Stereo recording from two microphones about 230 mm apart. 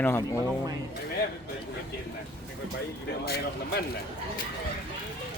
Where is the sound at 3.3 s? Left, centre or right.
Left.